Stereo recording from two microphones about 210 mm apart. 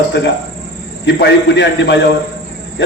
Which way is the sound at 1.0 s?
55° left (ahead or behind).